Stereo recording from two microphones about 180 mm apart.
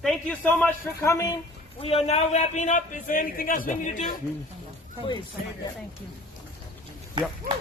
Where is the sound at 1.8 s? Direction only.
35° left (ahead or behind).